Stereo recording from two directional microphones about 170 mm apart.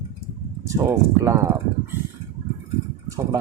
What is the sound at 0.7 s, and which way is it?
Speech, 20° right (ahead or behind).